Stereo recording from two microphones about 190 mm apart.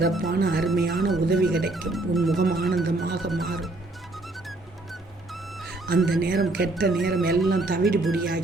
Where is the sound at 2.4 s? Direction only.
50° right (ahead or behind).